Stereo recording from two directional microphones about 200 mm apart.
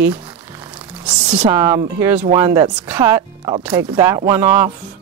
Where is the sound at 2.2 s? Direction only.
30° right (ahead or behind).